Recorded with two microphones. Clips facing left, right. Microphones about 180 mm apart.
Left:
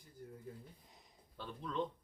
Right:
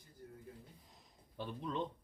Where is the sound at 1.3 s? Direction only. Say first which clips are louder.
Right 3 dB; 20° right (ahead or behind).